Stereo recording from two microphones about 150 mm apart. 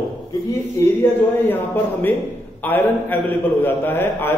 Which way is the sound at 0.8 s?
15° left (ahead or behind).